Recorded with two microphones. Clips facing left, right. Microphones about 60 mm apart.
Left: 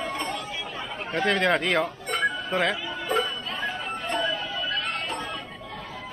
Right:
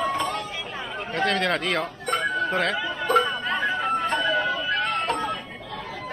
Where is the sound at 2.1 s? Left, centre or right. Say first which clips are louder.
Right 2 dB; right.